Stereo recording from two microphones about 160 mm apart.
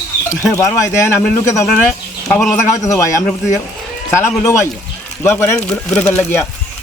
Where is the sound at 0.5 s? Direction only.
20° left (ahead or behind).